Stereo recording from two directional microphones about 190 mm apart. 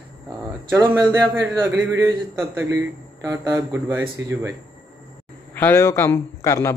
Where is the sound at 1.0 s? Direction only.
20° right (ahead or behind).